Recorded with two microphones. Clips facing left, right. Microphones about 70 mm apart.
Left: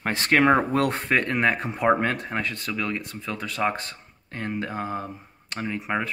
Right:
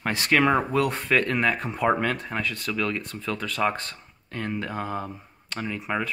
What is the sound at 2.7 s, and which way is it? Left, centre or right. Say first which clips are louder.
Speech: right 2 dB; left.